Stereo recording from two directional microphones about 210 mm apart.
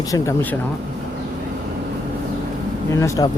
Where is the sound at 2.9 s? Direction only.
15° left (ahead or behind).